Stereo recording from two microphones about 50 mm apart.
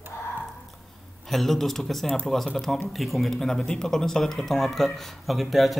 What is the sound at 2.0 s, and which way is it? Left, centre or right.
Speech, centre.